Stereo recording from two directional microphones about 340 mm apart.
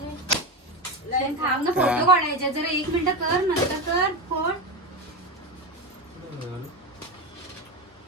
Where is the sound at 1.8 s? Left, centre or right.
Centre.